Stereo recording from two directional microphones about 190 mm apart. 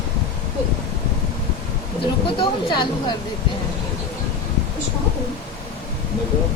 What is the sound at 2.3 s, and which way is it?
Speech, 25° left (ahead or behind).